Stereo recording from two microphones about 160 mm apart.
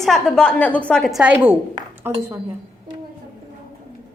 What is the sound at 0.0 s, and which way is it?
A woman's voice, 5° left (ahead or behind).